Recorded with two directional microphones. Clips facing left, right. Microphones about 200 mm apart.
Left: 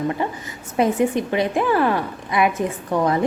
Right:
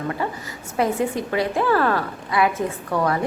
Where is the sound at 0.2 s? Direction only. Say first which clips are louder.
Left 1 dB; 20° left (ahead or behind).